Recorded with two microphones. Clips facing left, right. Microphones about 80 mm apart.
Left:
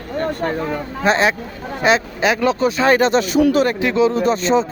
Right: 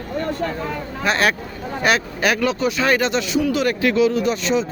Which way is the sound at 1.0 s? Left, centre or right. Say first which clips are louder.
Left 3 dB; left.